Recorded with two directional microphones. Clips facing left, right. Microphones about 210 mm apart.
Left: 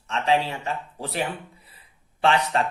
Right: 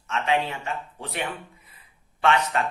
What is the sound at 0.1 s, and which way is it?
Speech, 35° left (ahead or behind).